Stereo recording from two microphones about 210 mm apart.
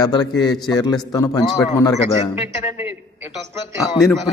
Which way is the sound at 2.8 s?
10° right (ahead or behind).